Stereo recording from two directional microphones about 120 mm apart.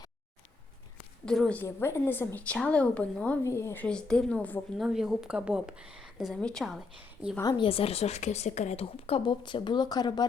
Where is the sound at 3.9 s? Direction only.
5° left (ahead or behind).